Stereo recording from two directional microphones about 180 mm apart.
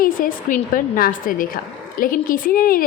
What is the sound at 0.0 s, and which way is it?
A woman's voice, 50° left (ahead or behind).